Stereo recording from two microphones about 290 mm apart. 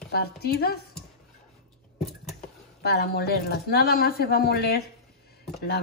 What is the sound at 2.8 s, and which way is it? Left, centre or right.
Speech, left.